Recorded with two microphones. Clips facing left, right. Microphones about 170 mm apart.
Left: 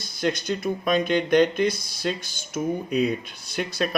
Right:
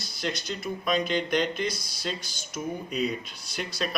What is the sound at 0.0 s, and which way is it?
Speech, 50° left (ahead or behind).